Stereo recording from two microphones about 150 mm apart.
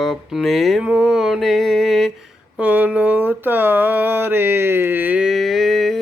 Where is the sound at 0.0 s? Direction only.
Centre (ahead or behind).